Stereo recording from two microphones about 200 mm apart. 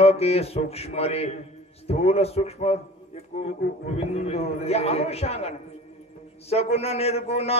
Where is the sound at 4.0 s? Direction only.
30° left (ahead or behind).